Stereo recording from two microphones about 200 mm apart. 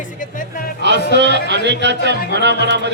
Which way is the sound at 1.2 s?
60° right (ahead or behind).